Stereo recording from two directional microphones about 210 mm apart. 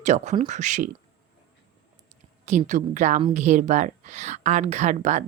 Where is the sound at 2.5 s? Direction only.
35° right (ahead or behind).